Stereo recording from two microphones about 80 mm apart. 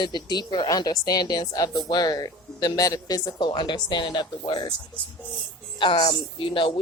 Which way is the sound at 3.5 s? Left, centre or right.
Left.